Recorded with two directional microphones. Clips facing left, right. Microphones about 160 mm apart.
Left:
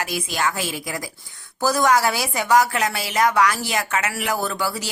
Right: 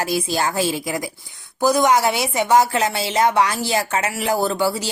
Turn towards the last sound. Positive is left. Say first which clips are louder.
# right 5 dB
turn(degrees=-25)  # may be behind; listen again after turning